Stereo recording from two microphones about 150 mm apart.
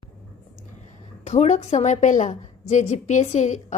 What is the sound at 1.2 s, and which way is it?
A woman's voice, 50° left (ahead or behind).